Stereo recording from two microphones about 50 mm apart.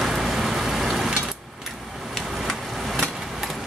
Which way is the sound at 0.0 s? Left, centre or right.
Centre.